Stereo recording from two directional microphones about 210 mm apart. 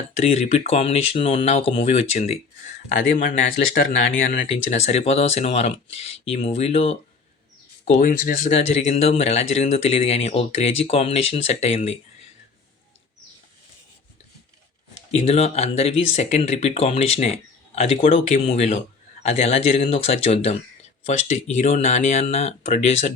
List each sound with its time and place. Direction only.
0.2 s speech: 30° left (ahead or behind)
8.5 s speech: 30° left (ahead or behind)
15.1 s speech: 30° left (ahead or behind)